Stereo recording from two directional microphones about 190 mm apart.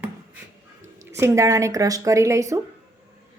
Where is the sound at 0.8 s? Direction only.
15° right (ahead or behind).